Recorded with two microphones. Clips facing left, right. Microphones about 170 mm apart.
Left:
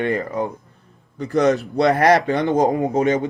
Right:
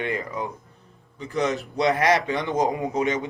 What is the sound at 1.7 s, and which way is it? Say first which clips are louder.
Speech: left 3 dB; 40° left (ahead or behind).